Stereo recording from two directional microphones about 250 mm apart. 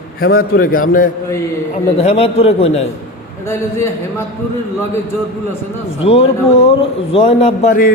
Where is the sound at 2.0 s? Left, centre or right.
Left.